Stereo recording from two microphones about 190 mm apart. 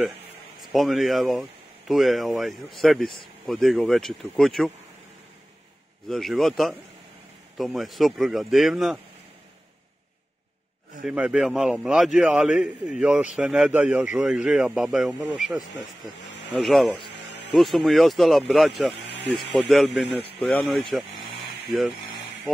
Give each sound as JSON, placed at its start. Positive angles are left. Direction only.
{"t": 0.7, "sound": "speech", "side_deg": 0}
{"t": 6.0, "sound": "speech", "side_deg": 0}
{"t": 11.1, "sound": "speech", "side_deg": -5}
{"t": 18.9, "sound": "a sound", "side_deg": 65}
{"t": 19.5, "sound": "speech", "side_deg": 0}